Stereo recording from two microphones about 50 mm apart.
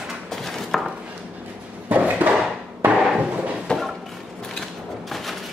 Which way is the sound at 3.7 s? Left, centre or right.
Centre.